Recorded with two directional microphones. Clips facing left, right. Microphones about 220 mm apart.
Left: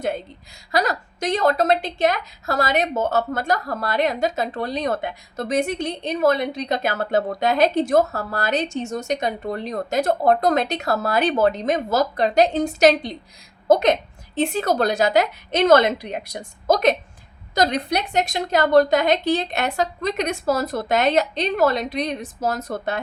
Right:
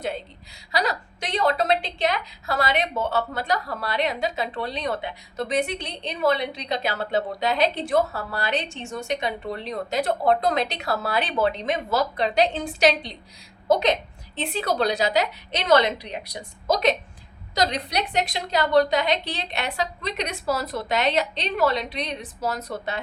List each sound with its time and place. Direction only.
0.7 s a woman's voice: 45° left (ahead or behind)